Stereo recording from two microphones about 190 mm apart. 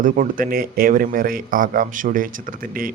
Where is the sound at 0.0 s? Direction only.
45° right (ahead or behind).